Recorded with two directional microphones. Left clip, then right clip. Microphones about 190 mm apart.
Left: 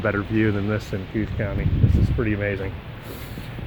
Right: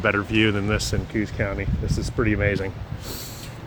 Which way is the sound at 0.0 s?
20° right (ahead or behind).